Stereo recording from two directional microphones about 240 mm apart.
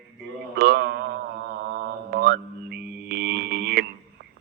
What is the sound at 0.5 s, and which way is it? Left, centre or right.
Mantra, right.